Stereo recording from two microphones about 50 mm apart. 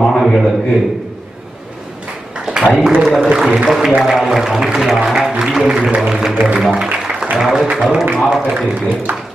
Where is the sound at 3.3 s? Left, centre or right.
Centre.